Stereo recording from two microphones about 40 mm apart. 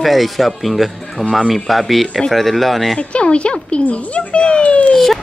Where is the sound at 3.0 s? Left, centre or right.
Left.